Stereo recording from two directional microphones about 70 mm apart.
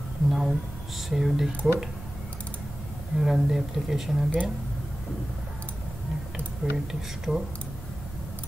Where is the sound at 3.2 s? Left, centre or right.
Centre.